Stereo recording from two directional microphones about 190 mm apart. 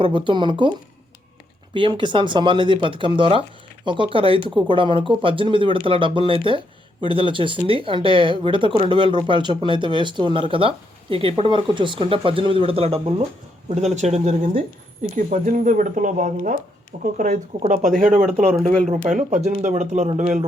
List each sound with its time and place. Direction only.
0.0 s speech: 25° right (ahead or behind)
1.7 s speech: 25° right (ahead or behind)